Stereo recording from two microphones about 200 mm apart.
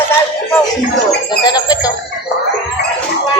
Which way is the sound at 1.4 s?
20° left (ahead or behind).